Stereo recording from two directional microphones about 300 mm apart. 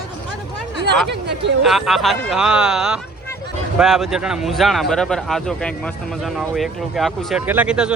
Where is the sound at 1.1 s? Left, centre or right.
Right.